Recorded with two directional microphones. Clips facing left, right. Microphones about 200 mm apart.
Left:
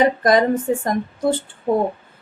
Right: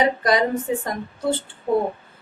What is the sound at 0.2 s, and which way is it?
Speech, 50° left (ahead or behind).